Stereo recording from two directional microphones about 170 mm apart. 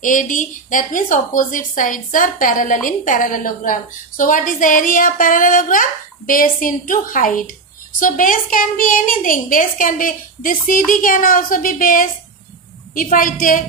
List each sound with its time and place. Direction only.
0.0 s a woman's voice: 50° left (ahead or behind)